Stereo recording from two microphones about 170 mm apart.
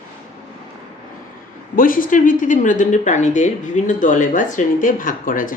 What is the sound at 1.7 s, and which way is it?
Speech, 55° left (ahead or behind).